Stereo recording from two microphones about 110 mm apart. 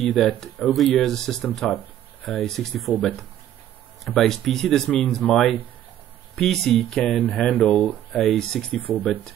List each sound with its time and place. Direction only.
0.1 s speech: 5° left (ahead or behind)
4.0 s speech: centre (ahead or behind)
8.2 s speech: 5° left (ahead or behind)
9.0 s speech: 15° left (ahead or behind)